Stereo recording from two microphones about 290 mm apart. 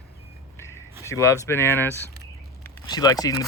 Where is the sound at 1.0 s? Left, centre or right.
Centre.